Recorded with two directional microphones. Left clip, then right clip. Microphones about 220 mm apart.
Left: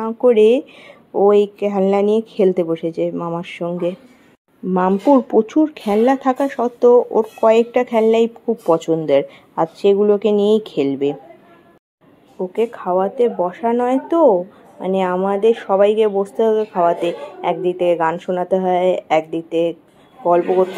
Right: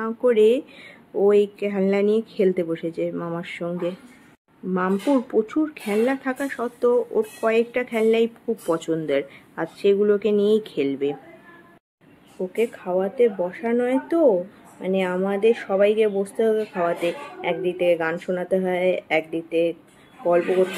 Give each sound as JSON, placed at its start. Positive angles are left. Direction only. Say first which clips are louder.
{"t": 0.0, "sound": "speech", "louder": "left 5 dB", "side_deg": 15}
{"t": 4.7, "sound": "speech", "louder": "left 8 dB", "side_deg": 20}
{"t": 12.5, "sound": "speech", "louder": "left 5 dB", "side_deg": 5}